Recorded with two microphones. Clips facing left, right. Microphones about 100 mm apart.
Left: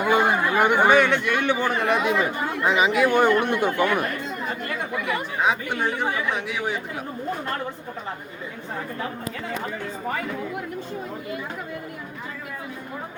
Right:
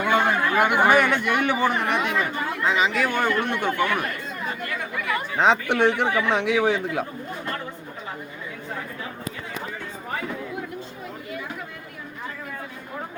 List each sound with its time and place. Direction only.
0.0 s chatter: 10° left (ahead or behind)
0.6 s speech: 5° right (ahead or behind)
2.0 s speech: 15° left (ahead or behind)
5.7 s speech: 90° right
6.1 s speech: 30° right (ahead or behind)
6.4 s speech: 90° right